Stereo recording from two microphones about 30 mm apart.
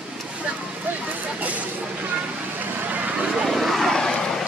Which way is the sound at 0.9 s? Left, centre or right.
Right.